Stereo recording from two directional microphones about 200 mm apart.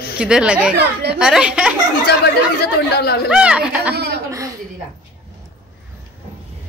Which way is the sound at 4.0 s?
55° right (ahead or behind).